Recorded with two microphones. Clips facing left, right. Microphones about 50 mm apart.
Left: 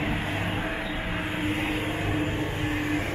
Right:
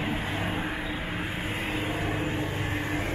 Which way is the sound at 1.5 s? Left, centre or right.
Left.